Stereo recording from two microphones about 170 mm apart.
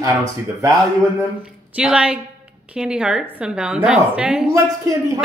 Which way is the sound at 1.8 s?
5° right (ahead or behind).